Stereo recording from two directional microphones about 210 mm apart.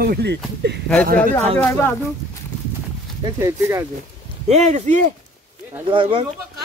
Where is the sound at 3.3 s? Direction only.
15° right (ahead or behind).